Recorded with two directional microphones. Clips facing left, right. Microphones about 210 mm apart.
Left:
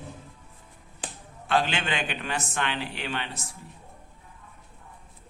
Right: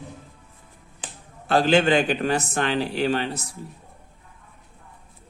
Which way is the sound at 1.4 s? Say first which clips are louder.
Right 8 dB; 40° right (ahead or behind).